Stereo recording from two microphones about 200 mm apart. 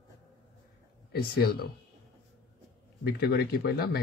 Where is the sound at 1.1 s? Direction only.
50° left (ahead or behind).